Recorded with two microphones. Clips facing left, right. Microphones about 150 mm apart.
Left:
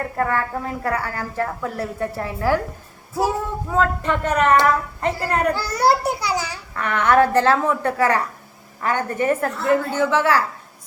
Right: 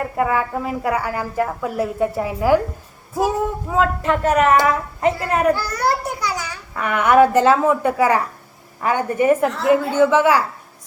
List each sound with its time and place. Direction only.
0.2 s a woman's voice: 10° right (ahead or behind)
5.5 s a child's voice: 25° left (ahead or behind)
6.7 s a woman's voice: 10° right (ahead or behind)